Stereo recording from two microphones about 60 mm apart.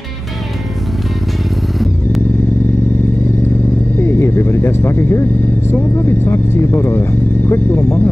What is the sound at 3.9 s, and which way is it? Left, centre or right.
Vehicle, left.